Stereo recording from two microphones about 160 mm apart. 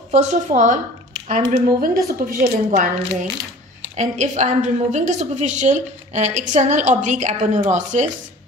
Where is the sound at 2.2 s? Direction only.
60° right (ahead or behind).